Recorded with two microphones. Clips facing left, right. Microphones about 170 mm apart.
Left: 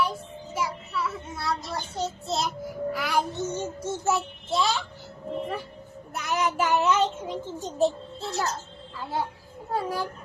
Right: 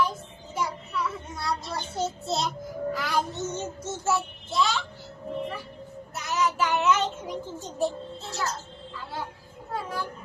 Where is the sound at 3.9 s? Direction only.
20° left (ahead or behind).